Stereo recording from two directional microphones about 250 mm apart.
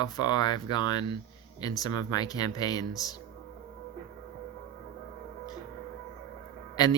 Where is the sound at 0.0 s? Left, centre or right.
Centre.